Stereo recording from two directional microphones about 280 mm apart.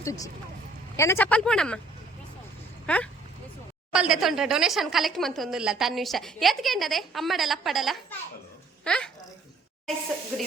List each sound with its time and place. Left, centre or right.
0.0 s a woman's voice: centre
2.8 s a woman's voice: centre